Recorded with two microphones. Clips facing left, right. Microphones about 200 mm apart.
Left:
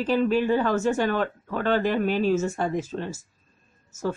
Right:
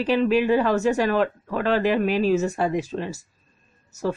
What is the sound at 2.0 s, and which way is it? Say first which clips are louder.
Speech: right 2 dB; 90° right.